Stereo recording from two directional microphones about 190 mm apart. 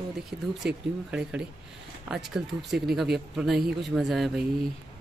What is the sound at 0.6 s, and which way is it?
Speech, 5° right (ahead or behind).